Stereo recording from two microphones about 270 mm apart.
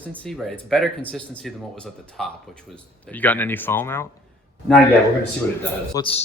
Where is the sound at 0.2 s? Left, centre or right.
Centre.